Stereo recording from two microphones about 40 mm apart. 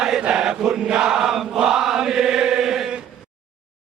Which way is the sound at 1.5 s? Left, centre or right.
Centre.